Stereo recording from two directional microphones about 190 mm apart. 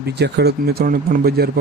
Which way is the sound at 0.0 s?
60° right (ahead or behind).